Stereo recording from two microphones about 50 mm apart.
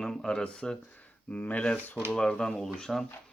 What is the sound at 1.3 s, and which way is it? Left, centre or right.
Speech, left.